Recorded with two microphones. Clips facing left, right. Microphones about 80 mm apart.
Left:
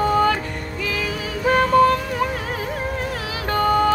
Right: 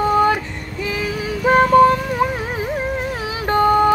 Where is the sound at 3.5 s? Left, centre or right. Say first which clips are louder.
Right 4 dB; right.